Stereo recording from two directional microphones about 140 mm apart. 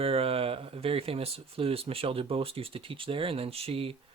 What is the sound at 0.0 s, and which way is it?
Speech, 40° right (ahead or behind).